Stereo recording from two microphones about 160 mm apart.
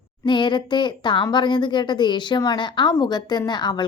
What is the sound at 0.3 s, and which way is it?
A woman's voice, 30° left (ahead or behind).